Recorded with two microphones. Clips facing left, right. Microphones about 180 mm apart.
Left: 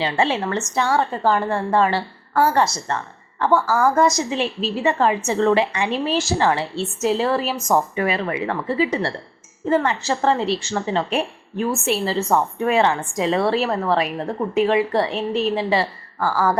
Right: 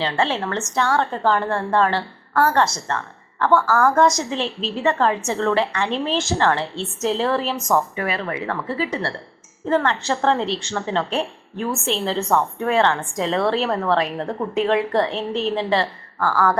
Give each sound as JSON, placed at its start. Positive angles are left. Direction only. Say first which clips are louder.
{"t": 0.0, "sound": "a woman's voice", "louder": "left 1 dB", "side_deg": 10}
{"t": 3.8, "sound": "a woman's voice", "louder": "even", "side_deg": 0}
{"t": 7.7, "sound": "a woman's voice", "louder": "left 2 dB", "side_deg": 20}
{"t": 12.3, "sound": "a woman's voice", "louder": "left 1 dB", "side_deg": 10}